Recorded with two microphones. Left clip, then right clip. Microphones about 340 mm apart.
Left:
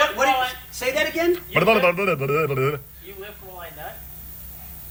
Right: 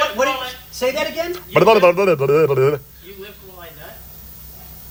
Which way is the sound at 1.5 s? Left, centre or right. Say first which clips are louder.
Right 8 dB; centre.